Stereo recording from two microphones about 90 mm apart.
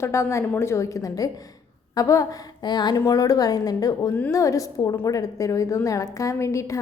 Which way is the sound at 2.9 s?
40° left (ahead or behind).